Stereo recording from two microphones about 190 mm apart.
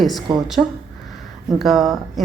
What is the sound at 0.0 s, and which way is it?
Speech, centre (ahead or behind).